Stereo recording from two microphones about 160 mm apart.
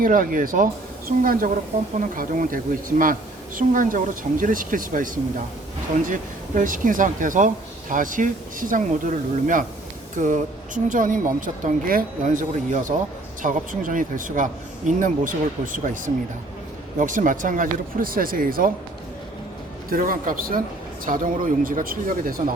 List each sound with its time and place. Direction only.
0.0 s speech: 60° right (ahead or behind)
19.9 s speech: 60° right (ahead or behind)